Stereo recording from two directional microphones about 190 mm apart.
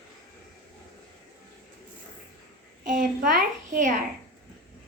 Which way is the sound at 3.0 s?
45° right (ahead or behind).